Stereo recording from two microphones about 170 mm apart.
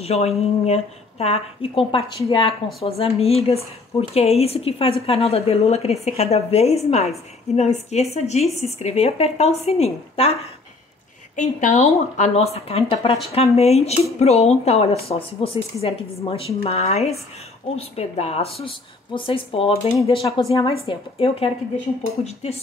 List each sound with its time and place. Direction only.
0.0 s a woman's voice: 40° left (ahead or behind)
11.3 s a woman's voice: 45° left (ahead or behind)